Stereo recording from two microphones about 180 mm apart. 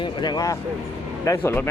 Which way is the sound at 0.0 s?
25° left (ahead or behind).